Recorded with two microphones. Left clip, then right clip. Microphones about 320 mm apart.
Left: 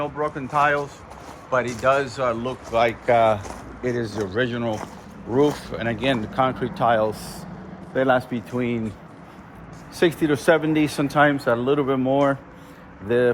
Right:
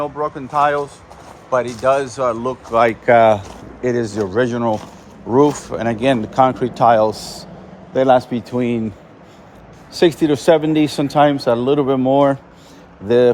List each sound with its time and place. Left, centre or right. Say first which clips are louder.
0.0 s speech: right 4 dB; centre; by 8.8 s right
10.0 s speech: right 6 dB; right